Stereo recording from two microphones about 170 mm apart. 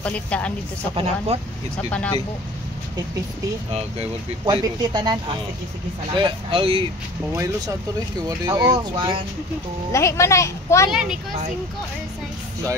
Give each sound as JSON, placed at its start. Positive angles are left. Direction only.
{"t": 0.0, "sound": "speech", "side_deg": 5}
{"t": 0.9, "sound": "speech", "side_deg": -35}
{"t": 1.8, "sound": "speech", "side_deg": 10}
{"t": 3.7, "sound": "speech", "side_deg": -30}
{"t": 8.5, "sound": "speech", "side_deg": -25}
{"t": 9.9, "sound": "speech", "side_deg": 15}
{"t": 10.9, "sound": "a woman's voice", "side_deg": -5}